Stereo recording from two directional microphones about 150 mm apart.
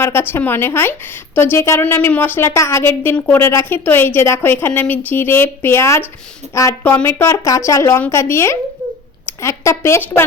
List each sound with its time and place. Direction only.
0.0 s a woman's voice: 15° left (ahead or behind)